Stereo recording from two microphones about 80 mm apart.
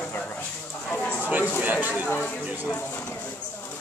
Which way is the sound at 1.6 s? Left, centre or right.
Centre.